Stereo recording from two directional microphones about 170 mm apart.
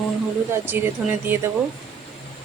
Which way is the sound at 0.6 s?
15° right (ahead or behind).